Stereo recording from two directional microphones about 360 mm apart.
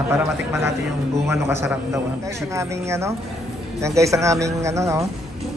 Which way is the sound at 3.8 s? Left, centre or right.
Centre.